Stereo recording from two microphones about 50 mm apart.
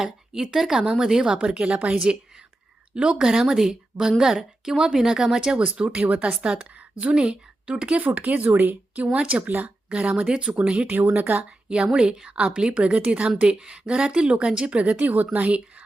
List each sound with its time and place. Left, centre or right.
0.0 s a woman's voice: centre
1.4 s a woman's voice: right
9.5 s speech: right
9.9 s a woman's voice: right
10.8 s speech: right
11.7 s a woman's voice: centre